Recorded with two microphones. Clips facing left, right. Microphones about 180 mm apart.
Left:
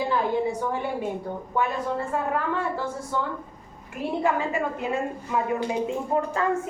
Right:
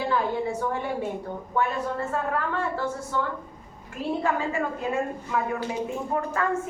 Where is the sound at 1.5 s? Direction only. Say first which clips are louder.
Even; 15° left (ahead or behind).